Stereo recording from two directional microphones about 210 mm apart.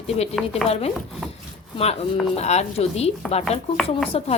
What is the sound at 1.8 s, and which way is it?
Speech, 30° left (ahead or behind).